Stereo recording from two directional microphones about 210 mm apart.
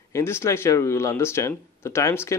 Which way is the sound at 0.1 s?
10° left (ahead or behind).